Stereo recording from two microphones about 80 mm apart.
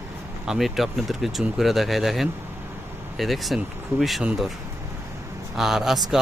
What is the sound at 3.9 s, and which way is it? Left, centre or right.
Speech, right.